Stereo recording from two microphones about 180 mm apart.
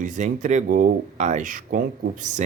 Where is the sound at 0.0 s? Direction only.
45° right (ahead or behind).